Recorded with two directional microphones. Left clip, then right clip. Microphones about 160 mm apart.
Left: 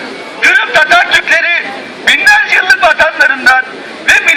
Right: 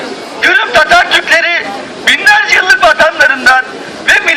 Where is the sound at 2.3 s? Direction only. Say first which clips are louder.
Right 1 dB; 10° right (ahead or behind).